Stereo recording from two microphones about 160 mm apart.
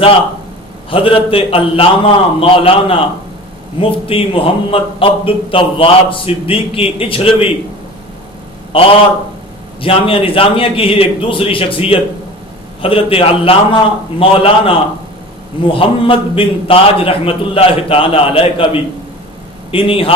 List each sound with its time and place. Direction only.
0.9 s a man's voice: 35° left (ahead or behind)
8.7 s a man's voice: 35° left (ahead or behind)